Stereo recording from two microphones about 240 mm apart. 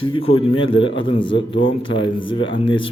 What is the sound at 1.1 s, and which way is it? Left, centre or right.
A man's voice, left.